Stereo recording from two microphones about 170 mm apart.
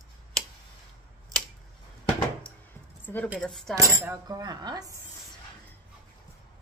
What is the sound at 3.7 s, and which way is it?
Speech, 20° right (ahead or behind).